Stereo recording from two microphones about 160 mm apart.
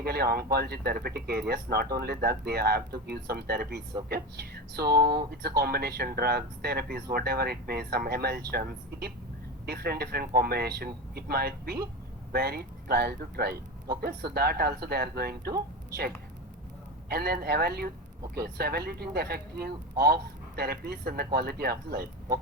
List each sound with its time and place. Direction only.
0.0 s speech: 75° right (ahead or behind)
4.9 s speech: 25° right (ahead or behind)
5.3 s speech: 80° right
17.1 s speech: 75° right (ahead or behind)